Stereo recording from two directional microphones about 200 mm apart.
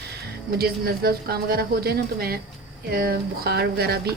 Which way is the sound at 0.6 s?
50° right (ahead or behind).